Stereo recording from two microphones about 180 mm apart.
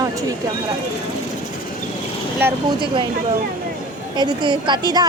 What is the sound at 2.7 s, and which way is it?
Speech, 25° right (ahead or behind).